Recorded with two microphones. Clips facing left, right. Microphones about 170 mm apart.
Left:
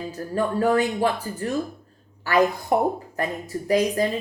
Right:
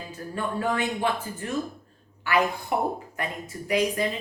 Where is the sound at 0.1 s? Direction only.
40° left (ahead or behind).